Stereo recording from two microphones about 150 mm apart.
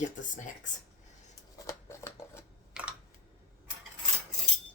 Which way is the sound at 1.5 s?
20° left (ahead or behind).